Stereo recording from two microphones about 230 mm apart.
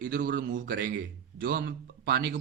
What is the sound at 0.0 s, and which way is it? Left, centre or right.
A man's voice, right.